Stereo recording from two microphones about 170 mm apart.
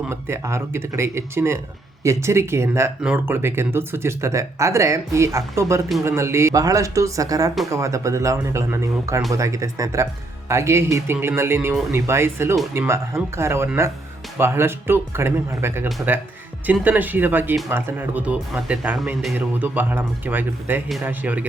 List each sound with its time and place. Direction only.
0.1 s speech: 15° right (ahead or behind)